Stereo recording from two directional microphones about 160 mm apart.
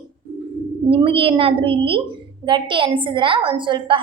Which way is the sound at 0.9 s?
35° right (ahead or behind).